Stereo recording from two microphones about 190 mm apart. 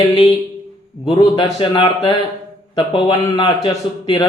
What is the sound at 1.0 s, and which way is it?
A man's voice, 25° left (ahead or behind).